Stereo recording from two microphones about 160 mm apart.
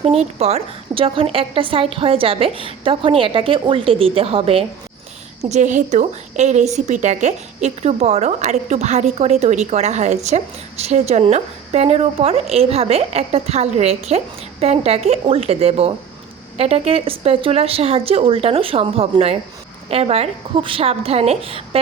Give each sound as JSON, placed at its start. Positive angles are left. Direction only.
{"t": 0.0, "sound": "a woman's voice", "side_deg": -40}
{"t": 5.4, "sound": "a woman's voice", "side_deg": -45}